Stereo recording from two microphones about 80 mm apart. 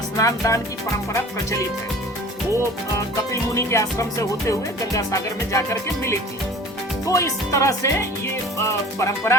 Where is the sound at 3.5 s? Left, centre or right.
Left.